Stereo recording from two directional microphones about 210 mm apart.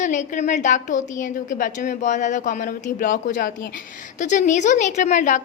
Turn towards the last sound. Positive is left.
turn(degrees=35)  # may be behind; listen again after turning